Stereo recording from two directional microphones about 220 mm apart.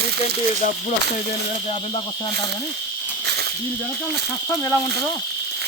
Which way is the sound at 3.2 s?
50° right (ahead or behind).